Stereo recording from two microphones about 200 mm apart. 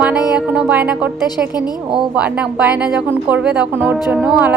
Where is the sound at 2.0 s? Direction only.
5° right (ahead or behind).